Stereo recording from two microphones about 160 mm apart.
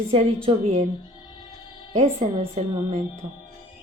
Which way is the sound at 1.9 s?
40° right (ahead or behind).